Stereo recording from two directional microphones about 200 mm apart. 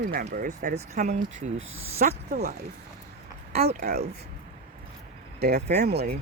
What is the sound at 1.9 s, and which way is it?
Speech, 50° right (ahead or behind).